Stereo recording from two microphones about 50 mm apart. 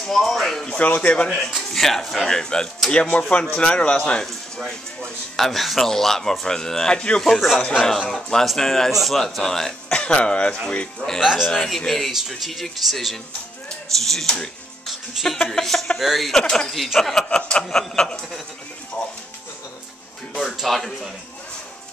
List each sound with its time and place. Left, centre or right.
0.0 s speech: centre
0.7 s speech: left
1.2 s speech: centre
4.3 s speech: centre
7.2 s speech: centre
9.8 s speech: centre
11.2 s a man's voice: centre
11.7 s speech: centre
12.1 s speech: centre
15.2 s speech: centre
16.3 s speech: centre
16.6 s speech: centre
17.2 s speech: centre
20.3 s speech: centre